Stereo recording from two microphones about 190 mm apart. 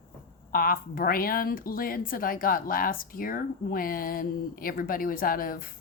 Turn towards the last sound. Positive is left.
turn(degrees=50)  # may be behind; listen again after turning